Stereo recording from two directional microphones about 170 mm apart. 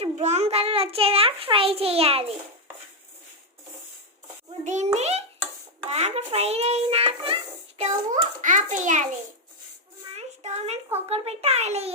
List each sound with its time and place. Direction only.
0.0 s a child's voice: 40° right (ahead or behind)
4.6 s a child's voice: 45° right (ahead or behind)
7.8 s a child's voice: 45° right (ahead or behind)
10.2 s a child's voice: 40° right (ahead or behind)